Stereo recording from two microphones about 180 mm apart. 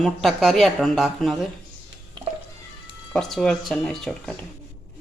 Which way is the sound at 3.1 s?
Centre (ahead or behind).